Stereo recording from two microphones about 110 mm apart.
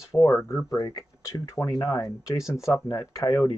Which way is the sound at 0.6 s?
35° left (ahead or behind).